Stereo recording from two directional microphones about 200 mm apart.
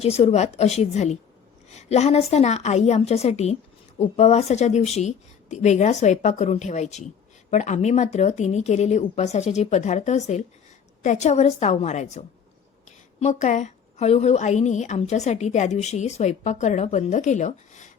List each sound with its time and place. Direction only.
0.0 s a woman's voice: 30° left (ahead or behind)